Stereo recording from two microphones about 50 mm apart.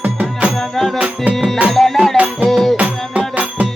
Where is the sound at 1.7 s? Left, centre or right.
Centre.